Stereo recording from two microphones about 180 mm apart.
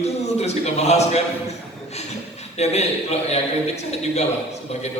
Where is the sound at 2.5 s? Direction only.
35° left (ahead or behind).